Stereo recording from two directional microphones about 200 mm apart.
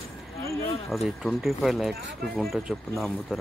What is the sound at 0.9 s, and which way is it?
Speech, centre (ahead or behind).